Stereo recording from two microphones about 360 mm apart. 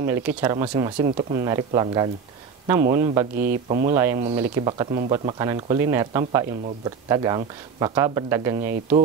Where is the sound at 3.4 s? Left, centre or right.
Right.